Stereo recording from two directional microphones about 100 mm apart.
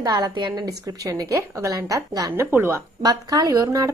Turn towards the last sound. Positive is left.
turn(degrees=-35)  # may be behind; listen again after turning